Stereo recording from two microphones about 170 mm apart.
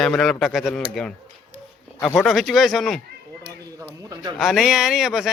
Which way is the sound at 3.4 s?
25° right (ahead or behind).